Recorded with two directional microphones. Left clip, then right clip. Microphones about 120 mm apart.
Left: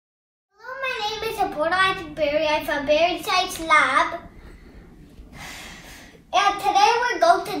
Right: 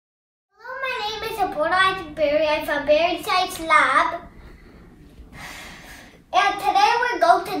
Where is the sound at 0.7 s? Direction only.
5° right (ahead or behind).